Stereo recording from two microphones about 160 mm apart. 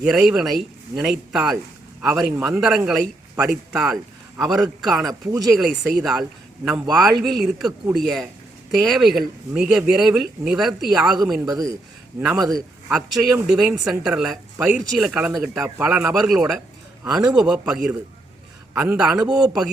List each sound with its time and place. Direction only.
0.0 s speech: 5° right (ahead or behind)
11.4 s speech: 20° right (ahead or behind)
12.9 s speech: 5° right (ahead or behind)